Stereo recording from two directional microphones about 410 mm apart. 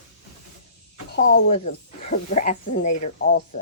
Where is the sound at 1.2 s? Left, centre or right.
Centre.